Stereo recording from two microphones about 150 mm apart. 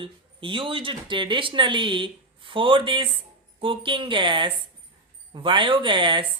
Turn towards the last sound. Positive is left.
turn(degrees=-30)  # may be behind; listen again after turning